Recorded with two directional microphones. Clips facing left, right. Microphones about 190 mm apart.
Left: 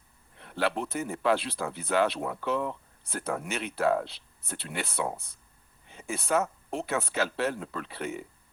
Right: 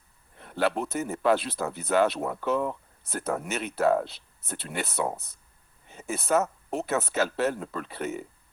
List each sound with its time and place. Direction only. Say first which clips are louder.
0.3 s speech: right 3 dB; 45° right (ahead or behind)